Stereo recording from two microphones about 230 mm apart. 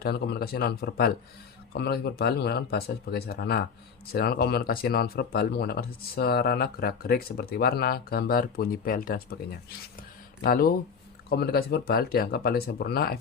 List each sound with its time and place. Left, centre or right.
0.0 s speech: left